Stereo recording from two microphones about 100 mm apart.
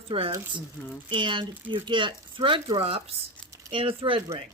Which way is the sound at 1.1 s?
55° right (ahead or behind).